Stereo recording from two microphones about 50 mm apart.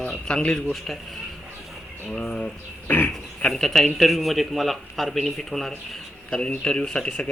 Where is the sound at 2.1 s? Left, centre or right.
Centre.